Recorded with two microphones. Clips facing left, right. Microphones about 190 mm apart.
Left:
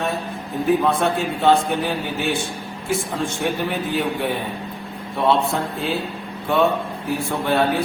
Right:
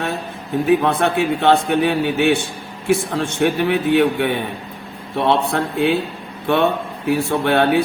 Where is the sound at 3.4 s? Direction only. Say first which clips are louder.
Right 9 dB; 70° right (ahead or behind).